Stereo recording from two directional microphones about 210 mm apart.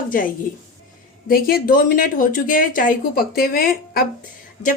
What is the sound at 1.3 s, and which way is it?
A woman's voice, 45° left (ahead or behind).